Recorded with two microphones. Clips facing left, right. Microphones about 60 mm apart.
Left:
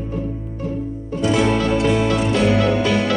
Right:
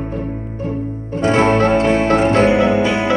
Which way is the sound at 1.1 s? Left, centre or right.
Right.